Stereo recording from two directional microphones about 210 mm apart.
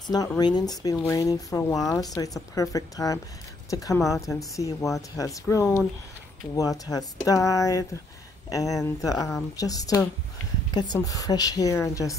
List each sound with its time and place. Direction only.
0.0 s speech: 15° left (ahead or behind)